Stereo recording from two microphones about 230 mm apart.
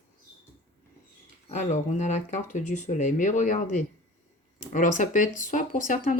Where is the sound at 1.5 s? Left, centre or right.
Left.